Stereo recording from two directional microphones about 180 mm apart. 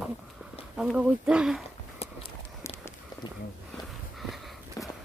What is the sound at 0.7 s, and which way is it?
Speech, 5° right (ahead or behind).